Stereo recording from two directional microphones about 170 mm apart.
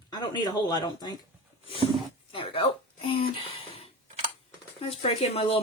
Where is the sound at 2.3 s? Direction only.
30° left (ahead or behind).